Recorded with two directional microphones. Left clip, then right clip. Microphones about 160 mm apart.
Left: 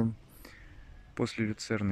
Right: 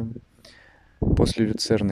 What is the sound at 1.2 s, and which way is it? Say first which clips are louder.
Speech: right 9 dB; 85° right.